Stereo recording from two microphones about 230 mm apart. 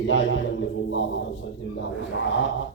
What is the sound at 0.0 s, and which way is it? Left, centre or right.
A man's voice, left.